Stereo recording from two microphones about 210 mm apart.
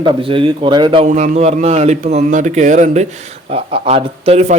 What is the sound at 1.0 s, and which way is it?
Speech, 35° right (ahead or behind).